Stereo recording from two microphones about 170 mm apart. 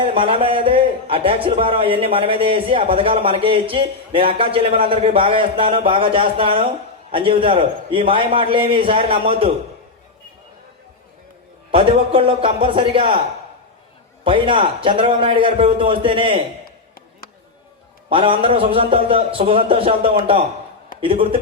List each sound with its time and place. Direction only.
0.0 s a man's voice: 30° right (ahead or behind)
11.7 s a man's voice: 30° right (ahead or behind)
14.3 s a man's voice: 30° right (ahead or behind)
18.1 s a man's voice: 30° right (ahead or behind)